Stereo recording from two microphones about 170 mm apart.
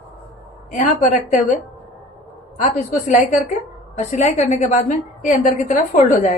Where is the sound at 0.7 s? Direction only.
50° left (ahead or behind).